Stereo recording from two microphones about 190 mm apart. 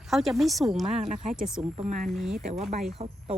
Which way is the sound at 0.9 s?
35° right (ahead or behind).